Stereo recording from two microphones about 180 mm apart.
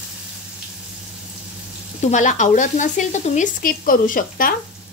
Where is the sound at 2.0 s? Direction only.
45° left (ahead or behind).